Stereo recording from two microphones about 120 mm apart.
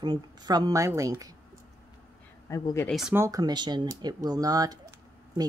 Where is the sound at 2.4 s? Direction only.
25° left (ahead or behind).